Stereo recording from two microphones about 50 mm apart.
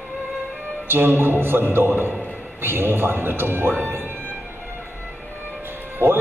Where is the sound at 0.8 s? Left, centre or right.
Right.